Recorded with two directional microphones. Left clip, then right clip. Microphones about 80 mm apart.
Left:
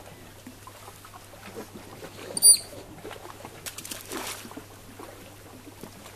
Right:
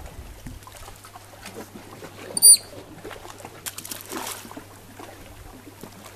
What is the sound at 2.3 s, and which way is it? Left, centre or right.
Rodents, centre.